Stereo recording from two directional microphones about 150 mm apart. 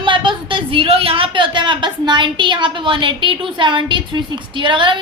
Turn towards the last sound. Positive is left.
turn(degrees=-35)  # may be behind; listen again after turning